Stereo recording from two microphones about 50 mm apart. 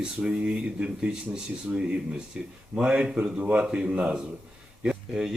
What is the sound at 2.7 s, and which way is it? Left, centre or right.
Speech, centre.